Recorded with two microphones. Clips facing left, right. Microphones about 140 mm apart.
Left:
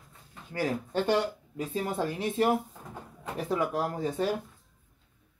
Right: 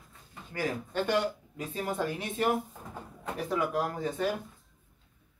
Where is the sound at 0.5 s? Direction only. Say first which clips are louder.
Left 3 dB; 30° left (ahead or behind).